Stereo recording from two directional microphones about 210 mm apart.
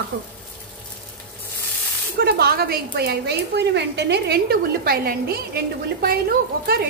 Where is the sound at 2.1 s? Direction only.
50° right (ahead or behind).